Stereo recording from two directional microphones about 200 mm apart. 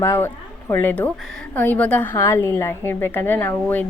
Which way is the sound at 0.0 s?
15° left (ahead or behind).